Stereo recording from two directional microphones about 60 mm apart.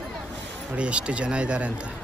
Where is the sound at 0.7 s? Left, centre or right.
Centre.